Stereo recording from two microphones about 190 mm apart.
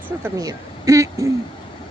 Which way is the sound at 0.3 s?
20° right (ahead or behind).